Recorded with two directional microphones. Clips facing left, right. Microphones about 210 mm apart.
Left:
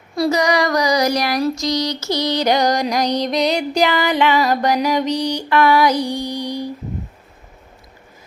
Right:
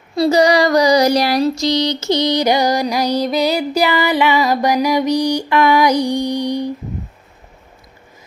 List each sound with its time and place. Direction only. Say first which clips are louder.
0.2 s child singing: right 4 dB; 30° right (ahead or behind)